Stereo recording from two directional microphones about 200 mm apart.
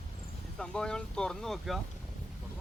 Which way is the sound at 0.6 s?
5° left (ahead or behind).